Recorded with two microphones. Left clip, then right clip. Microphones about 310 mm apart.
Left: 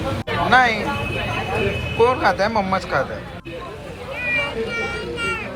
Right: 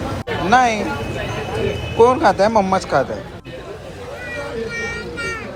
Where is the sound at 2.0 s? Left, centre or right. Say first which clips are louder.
Right 4 dB; centre.